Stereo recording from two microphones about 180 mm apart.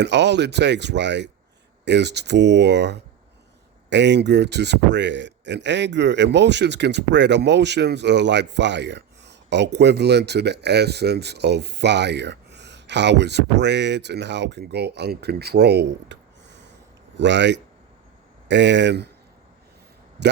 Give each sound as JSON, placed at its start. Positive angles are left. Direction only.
{"t": 0.0, "sound": "speech", "side_deg": -75}